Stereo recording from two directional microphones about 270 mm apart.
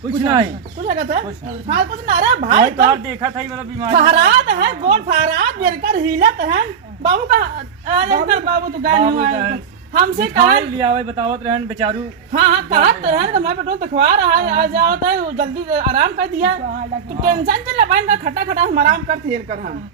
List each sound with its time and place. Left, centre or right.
0.2 s a man's voice: centre
0.9 s a woman's voice: right
2.7 s a man's voice: centre
3.9 s a woman's voice: right
10.8 s a man's voice: centre
12.7 s a woman's voice: right
17.2 s a woman's voice: right